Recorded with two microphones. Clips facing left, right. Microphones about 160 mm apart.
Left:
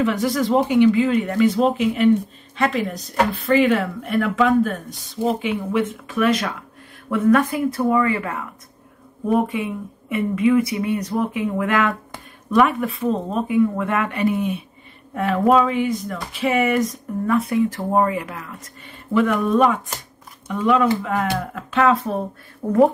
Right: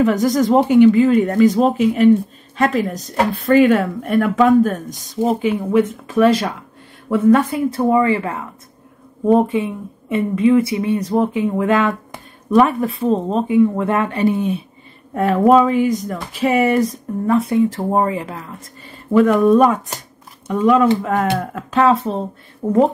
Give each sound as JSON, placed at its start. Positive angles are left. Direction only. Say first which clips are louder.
{"t": 0.0, "sound": "speech", "louder": "right 5 dB", "side_deg": -40}